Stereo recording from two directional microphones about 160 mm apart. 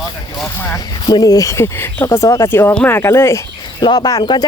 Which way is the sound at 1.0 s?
25° left (ahead or behind).